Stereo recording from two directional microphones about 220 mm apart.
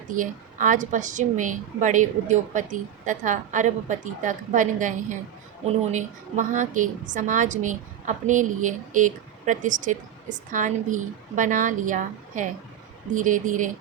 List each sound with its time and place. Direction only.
0.2 s a woman's voice: 35° right (ahead or behind)